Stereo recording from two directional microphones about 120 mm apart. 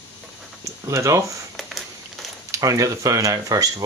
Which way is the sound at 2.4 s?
25° right (ahead or behind).